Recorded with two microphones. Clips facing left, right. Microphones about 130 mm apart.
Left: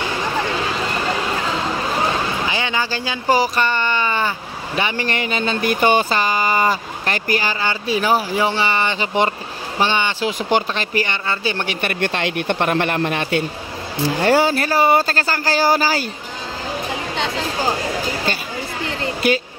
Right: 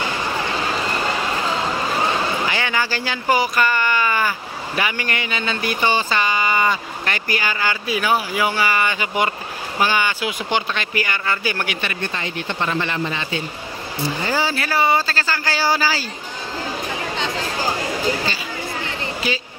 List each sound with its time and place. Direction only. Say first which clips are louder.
2.4 s a sound: even; 20° left (ahead or behind)
3.3 s speech: left 1 dB; 30° left (ahead or behind); by 6.0 s 50° left (ahead or behind)
6.0 s speech: left 2 dB; 35° left (ahead or behind)
12.0 s speech: left 6 dB; 70° left (ahead or behind)
14.0 s speech: left 7 dB; 70° left (ahead or behind)
14.4 s speech: left 4 dB; 50° left (ahead or behind)